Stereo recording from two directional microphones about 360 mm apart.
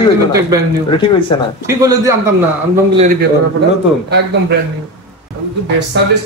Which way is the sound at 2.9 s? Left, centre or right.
Right.